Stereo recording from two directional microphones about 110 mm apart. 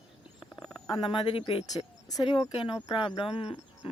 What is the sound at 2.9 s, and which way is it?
Speech, 50° left (ahead or behind).